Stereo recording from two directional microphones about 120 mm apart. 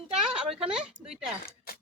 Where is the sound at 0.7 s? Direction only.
5° right (ahead or behind).